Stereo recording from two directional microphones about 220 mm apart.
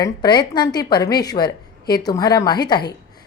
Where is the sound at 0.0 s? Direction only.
20° left (ahead or behind).